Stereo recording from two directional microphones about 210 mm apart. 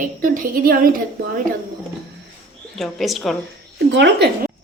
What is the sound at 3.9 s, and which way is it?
Speech, 55° right (ahead or behind).